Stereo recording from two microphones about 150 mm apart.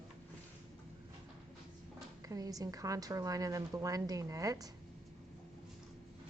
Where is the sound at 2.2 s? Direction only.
25° right (ahead or behind).